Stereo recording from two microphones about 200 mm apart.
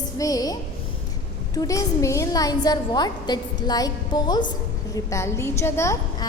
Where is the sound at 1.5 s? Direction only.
15° left (ahead or behind).